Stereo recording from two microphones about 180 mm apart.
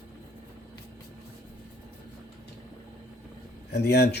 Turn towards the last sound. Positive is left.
turn(degrees=65)  # may be behind; listen again after turning